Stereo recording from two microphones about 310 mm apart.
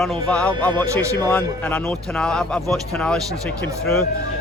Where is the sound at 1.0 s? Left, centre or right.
Centre.